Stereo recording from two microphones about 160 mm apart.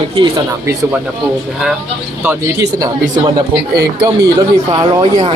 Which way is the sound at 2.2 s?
15° right (ahead or behind).